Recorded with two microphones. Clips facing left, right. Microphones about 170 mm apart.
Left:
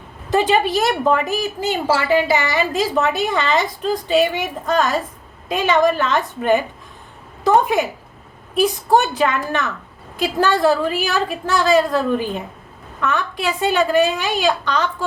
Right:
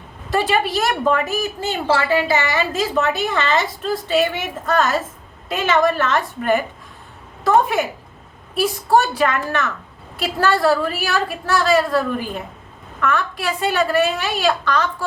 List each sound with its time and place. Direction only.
0.3 s a woman's voice: 20° left (ahead or behind)